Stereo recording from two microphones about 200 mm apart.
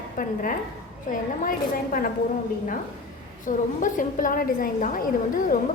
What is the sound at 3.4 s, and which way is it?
A woman's voice, 40° left (ahead or behind).